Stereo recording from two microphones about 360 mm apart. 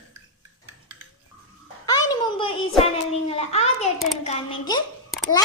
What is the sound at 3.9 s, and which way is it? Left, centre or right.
Speech, centre.